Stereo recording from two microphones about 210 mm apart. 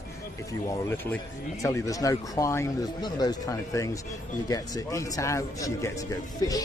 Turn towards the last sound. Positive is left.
turn(degrees=15)  # may be behind; listen again after turning